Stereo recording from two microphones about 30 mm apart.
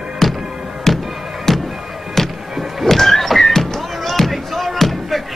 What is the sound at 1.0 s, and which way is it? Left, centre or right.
Music, centre.